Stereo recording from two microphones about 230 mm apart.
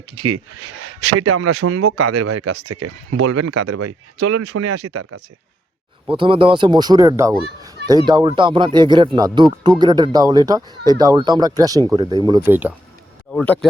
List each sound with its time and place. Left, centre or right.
0.2 s speech: right
6.1 s speech: right
13.3 s speech: centre